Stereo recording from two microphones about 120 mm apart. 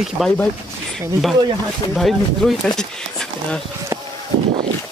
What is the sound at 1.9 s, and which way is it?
Speech, centre (ahead or behind).